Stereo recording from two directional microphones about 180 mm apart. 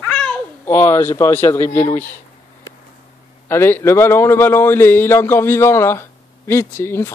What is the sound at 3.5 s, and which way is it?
A man's voice, 15° left (ahead or behind).